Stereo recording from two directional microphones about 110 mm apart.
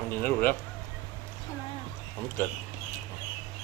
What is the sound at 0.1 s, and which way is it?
Speech, 20° left (ahead or behind).